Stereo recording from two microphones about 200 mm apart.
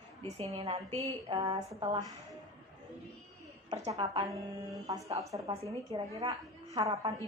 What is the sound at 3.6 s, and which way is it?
Speech, 30° right (ahead or behind).